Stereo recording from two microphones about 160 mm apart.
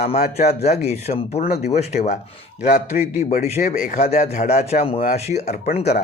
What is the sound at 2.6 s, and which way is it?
Speech, 50° left (ahead or behind).